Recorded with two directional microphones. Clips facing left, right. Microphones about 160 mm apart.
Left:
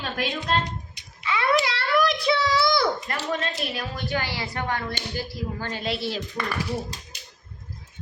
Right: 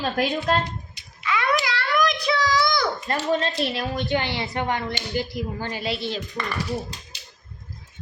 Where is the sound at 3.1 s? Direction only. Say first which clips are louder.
Right 5 dB; 30° right (ahead or behind); by 5.9 s 10° right (ahead or behind).